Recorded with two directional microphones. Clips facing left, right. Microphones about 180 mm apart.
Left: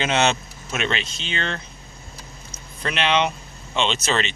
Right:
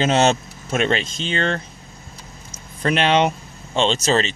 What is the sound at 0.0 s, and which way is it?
Speech, 40° right (ahead or behind).